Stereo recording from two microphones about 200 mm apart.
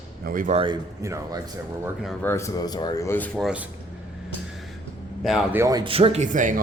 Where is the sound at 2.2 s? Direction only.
10° left (ahead or behind).